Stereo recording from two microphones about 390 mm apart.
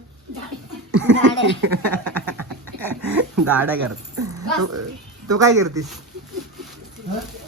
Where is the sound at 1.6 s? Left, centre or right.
Right.